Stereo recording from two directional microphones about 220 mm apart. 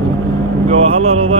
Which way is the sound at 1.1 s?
25° right (ahead or behind).